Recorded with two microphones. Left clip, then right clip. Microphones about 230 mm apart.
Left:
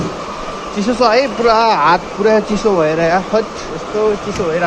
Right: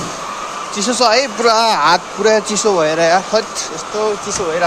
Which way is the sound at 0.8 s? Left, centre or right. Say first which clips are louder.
Left 1 dB; right.